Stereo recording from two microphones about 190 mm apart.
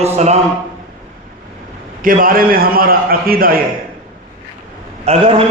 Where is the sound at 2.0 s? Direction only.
45° right (ahead or behind).